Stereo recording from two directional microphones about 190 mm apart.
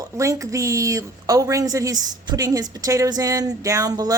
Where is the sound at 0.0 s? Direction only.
15° right (ahead or behind).